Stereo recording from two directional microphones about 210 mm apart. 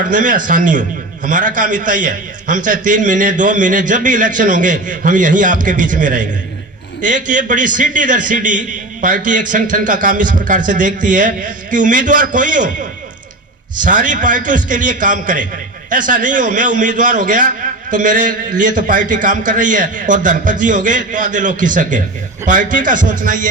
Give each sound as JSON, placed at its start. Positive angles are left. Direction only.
{"t": 0.1, "sound": "a man's voice", "side_deg": -40}
{"t": 13.8, "sound": "a man's voice", "side_deg": -40}